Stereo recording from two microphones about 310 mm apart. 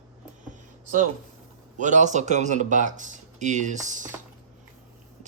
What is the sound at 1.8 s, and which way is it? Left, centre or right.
Speech, right.